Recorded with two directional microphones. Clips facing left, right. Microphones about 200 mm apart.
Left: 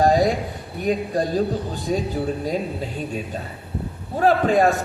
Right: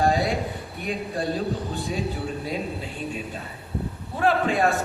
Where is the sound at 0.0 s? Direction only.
40° left (ahead or behind).